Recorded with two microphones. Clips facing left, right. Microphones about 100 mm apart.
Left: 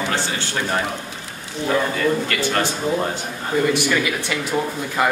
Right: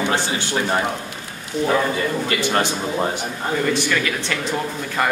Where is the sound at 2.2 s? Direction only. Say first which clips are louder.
Right 1 dB; 20° right (ahead or behind).